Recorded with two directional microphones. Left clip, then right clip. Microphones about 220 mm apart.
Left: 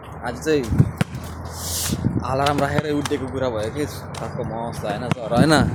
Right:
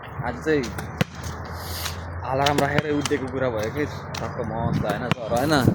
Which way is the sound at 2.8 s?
15° right (ahead or behind).